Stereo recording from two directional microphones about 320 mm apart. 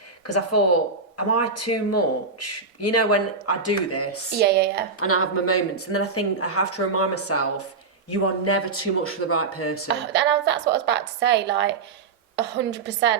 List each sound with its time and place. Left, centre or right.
0.3 s speech: left
4.4 s a woman's voice: right
4.9 s speech: left
9.9 s a woman's voice: right